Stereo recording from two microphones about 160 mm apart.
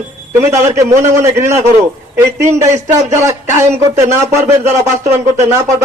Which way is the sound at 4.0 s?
20° right (ahead or behind).